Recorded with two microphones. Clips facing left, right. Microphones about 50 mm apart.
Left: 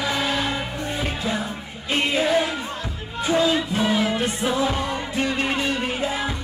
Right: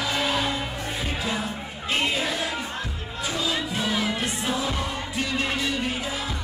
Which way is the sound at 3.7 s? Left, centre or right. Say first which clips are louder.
Left 5 dB; centre.